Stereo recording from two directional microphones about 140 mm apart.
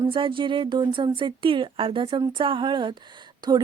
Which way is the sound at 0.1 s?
35° right (ahead or behind).